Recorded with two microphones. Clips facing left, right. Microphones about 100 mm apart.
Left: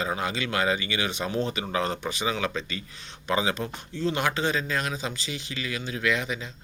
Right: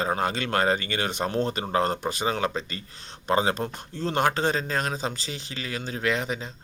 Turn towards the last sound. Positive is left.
turn(degrees=-35)  # may be behind; listen again after turning